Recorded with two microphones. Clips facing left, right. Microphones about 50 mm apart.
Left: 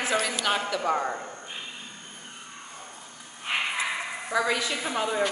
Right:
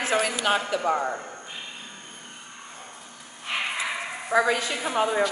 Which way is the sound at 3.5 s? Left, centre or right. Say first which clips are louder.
Left 1 dB; centre.